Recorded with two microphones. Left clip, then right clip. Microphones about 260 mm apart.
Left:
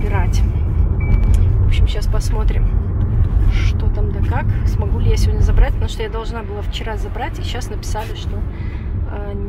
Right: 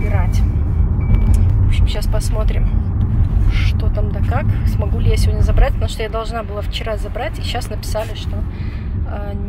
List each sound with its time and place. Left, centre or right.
5.0 s speech: centre